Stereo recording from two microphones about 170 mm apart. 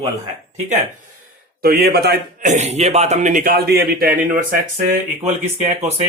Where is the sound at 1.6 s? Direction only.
65° right (ahead or behind).